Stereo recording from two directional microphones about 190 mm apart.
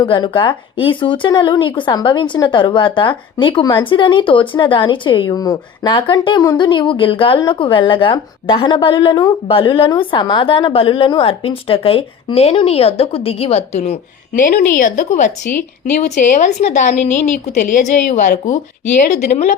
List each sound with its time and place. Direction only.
0.0 s a woman's voice: 25° left (ahead or behind)